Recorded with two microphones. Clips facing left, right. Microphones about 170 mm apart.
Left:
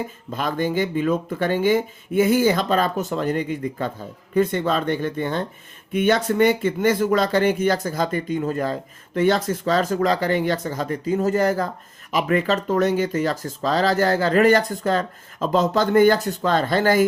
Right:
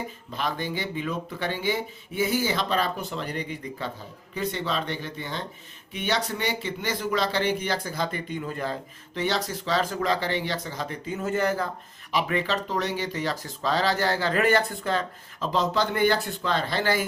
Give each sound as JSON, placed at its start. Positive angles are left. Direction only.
{"t": 0.3, "sound": "speech", "side_deg": 50}